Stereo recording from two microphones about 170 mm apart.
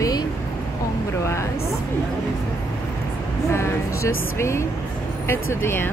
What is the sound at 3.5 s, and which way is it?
Speech, 15° left (ahead or behind).